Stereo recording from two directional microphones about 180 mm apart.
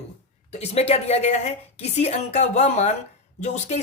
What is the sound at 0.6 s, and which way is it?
Speech, 35° left (ahead or behind).